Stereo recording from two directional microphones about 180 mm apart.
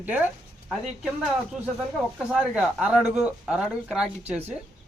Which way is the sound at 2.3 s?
5° right (ahead or behind).